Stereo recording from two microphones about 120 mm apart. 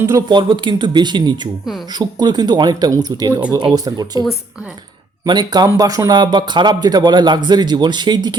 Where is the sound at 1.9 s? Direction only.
35° right (ahead or behind).